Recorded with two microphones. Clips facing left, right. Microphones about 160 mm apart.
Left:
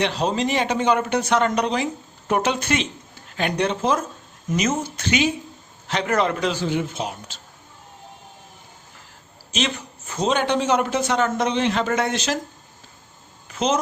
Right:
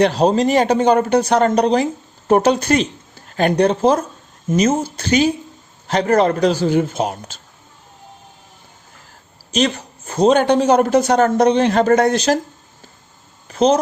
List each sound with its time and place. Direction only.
0.0 s speech: 40° right (ahead or behind)
9.5 s speech: 40° right (ahead or behind)
13.5 s a sound: 35° right (ahead or behind)